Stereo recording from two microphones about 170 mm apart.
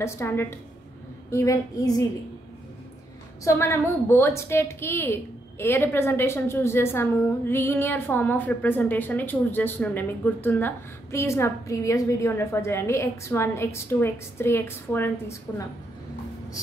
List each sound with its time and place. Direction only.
0.0 s a woman's voice: 15° left (ahead or behind)
3.4 s a woman's voice: 15° left (ahead or behind)